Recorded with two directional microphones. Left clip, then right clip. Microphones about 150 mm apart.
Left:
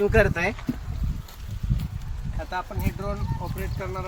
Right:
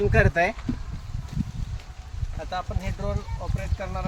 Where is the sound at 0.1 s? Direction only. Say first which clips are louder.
Even; 5° right (ahead or behind).